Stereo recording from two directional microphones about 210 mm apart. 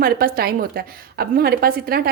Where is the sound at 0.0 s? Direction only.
45° right (ahead or behind).